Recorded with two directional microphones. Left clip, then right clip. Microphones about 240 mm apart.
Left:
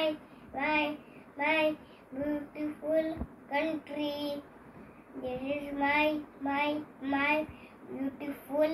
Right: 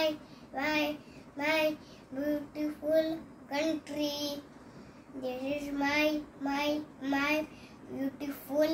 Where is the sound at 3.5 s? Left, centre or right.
Centre.